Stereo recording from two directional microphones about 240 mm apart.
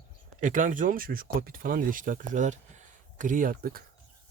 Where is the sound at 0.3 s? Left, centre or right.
Right.